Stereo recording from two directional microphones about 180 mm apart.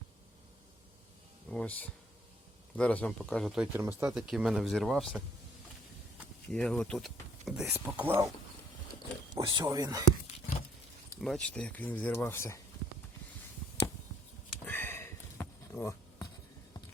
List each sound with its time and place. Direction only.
1.5 s a sound: 5° left (ahead or behind)
2.7 s speech: 5° left (ahead or behind)
6.5 s speech: 5° left (ahead or behind)
9.3 s speech: 25° right (ahead or behind)
11.2 s speech: 5° left (ahead or behind)
14.6 s a sound: 10° left (ahead or behind)